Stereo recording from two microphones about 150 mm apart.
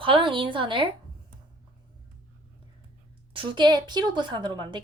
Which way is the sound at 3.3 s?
35° right (ahead or behind).